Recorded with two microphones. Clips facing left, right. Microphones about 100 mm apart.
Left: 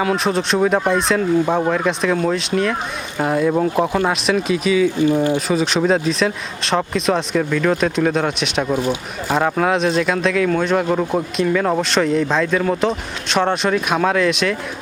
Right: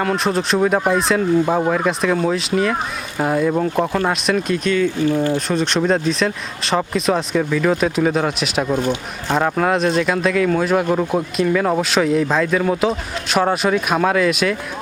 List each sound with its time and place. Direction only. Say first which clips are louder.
0.0 s speech: left 1 dB; centre (ahead or behind)
5.0 s speech: left 1 dB; 15° left (ahead or behind)
5.5 s speech: left 1 dB; centre (ahead or behind)